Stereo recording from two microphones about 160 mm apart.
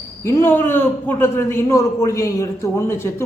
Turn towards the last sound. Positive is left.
turn(degrees=15)  # may be behind; listen again after turning